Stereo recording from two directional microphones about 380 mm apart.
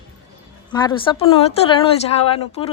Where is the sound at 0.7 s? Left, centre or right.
Centre.